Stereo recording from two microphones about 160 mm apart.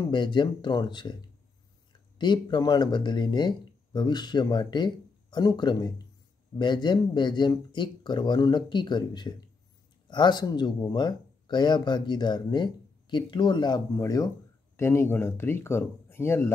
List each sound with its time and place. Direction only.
0.1 s speech: 30° left (ahead or behind); by 16.5 s 15° left (ahead or behind)